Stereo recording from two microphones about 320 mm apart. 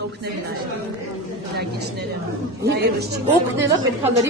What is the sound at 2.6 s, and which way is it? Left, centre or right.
Speech, right.